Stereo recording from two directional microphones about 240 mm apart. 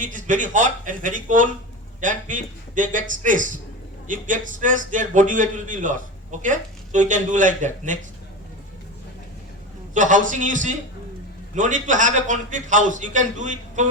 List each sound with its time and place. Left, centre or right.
0.0 s a man's voice: right
9.9 s a man's voice: right